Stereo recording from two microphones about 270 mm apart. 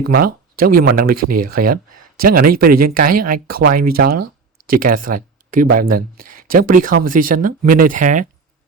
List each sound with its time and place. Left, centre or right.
0.6 s speech: right
4.2 s a sound: right
4.8 s speech: right